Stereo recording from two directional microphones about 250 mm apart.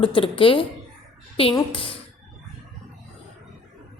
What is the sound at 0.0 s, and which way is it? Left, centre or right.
Speech, left.